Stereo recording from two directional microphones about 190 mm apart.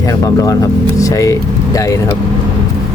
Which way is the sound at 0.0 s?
15° left (ahead or behind).